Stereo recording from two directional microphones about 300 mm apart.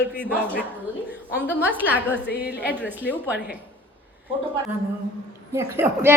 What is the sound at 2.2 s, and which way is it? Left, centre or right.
Speech, left.